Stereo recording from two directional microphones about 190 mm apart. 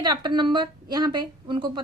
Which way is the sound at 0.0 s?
25° right (ahead or behind).